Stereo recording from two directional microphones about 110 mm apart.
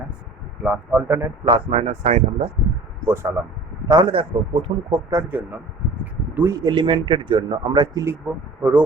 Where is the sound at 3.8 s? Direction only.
40° right (ahead or behind).